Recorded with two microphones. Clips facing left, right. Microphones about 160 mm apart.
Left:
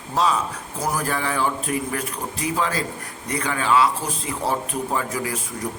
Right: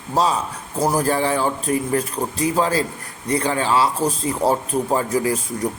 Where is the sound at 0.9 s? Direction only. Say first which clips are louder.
Right 5 dB; 35° right (ahead or behind).